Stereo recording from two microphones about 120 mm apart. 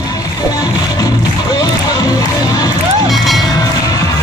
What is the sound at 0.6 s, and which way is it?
Music, 35° left (ahead or behind).